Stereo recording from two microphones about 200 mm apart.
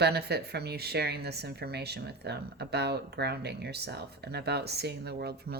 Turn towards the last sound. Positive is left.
turn(degrees=-50)  # may be behind; listen again after turning